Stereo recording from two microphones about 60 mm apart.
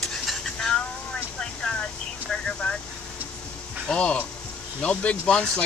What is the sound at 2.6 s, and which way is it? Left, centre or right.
Vehicle, centre.